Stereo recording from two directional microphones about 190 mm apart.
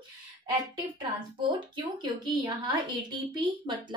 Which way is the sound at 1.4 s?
25° right (ahead or behind).